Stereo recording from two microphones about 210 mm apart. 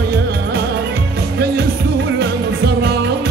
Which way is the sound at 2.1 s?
50° right (ahead or behind).